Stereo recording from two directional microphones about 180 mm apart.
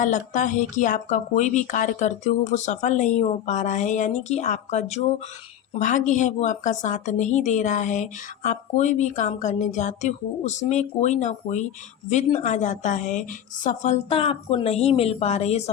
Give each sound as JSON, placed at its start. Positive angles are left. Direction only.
{"t": 0.0, "sound": "a woman's voice", "side_deg": 45}